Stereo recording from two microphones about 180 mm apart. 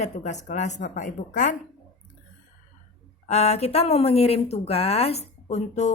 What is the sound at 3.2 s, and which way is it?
Speech, 35° left (ahead or behind).